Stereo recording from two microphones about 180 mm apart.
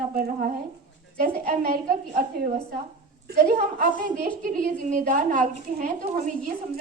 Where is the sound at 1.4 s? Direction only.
55° right (ahead or behind).